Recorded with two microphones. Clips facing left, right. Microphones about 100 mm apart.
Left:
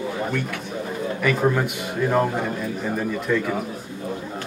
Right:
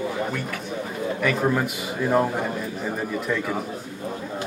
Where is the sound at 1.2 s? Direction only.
Centre (ahead or behind).